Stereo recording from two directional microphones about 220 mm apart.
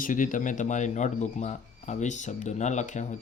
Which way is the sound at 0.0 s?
35° left (ahead or behind).